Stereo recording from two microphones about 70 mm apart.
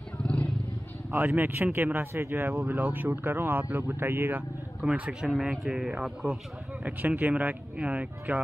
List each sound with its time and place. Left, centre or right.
0.2 s wild animals: centre
1.1 s speech: right
4.8 s a man's voice: centre
5.3 s a man's voice: centre
6.8 s speech: right